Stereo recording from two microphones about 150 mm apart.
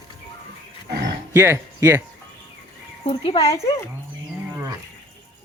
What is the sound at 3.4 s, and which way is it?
Speech, 20° left (ahead or behind).